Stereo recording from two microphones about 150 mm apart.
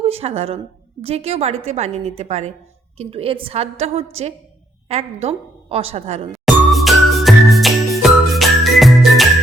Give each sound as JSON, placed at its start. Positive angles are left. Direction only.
{"t": 0.0, "sound": "a woman's voice", "side_deg": -40}
{"t": 6.4, "sound": "music", "side_deg": 0}